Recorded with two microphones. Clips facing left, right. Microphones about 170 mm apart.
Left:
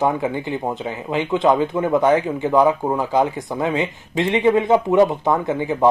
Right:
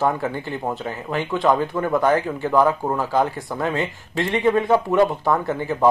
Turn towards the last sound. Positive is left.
turn(degrees=20)  # may be behind; listen again after turning